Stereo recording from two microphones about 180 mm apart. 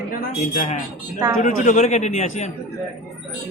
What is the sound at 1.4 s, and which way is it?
A man's voice, 45° left (ahead or behind).